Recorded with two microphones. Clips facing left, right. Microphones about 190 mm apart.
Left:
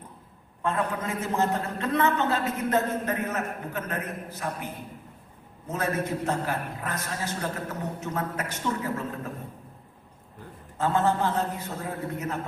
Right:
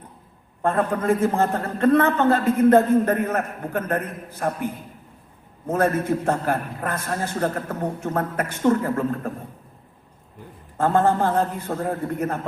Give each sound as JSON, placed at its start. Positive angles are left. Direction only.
{"t": 0.6, "sound": "a man's voice", "side_deg": -50}
{"t": 10.8, "sound": "a man's voice", "side_deg": -50}